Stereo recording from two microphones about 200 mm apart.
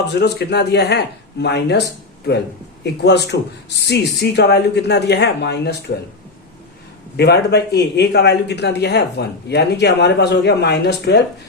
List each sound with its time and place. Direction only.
0.1 s a man's voice: 55° left (ahead or behind)
2.8 s a man's voice: 55° left (ahead or behind)
7.2 s a man's voice: 55° left (ahead or behind)